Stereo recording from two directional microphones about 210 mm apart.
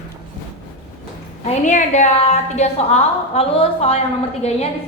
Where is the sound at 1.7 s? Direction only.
35° left (ahead or behind).